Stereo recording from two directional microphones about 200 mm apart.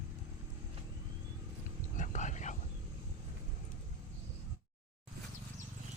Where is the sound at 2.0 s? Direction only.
35° left (ahead or behind).